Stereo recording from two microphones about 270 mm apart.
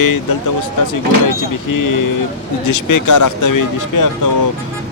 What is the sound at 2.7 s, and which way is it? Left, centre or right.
Speech, left.